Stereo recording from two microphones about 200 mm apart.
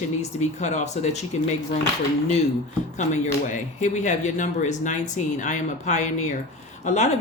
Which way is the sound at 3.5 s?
40° left (ahead or behind).